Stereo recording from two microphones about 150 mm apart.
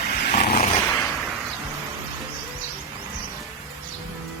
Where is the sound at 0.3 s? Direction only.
60° left (ahead or behind).